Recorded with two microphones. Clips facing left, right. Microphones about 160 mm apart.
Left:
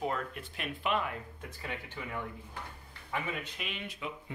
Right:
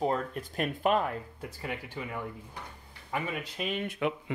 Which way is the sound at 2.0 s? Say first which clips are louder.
Right 4 dB; 30° right (ahead or behind).